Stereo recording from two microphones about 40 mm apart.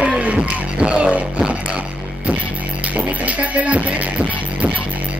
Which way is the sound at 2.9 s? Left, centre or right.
Right.